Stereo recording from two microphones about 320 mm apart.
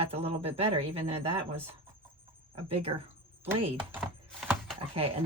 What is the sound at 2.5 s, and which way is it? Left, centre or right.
Speech, centre.